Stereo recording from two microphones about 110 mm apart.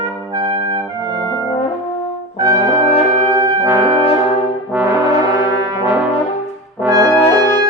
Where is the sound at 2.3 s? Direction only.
35° right (ahead or behind).